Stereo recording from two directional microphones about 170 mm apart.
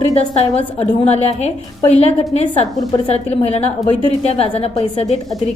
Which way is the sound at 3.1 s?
40° left (ahead or behind).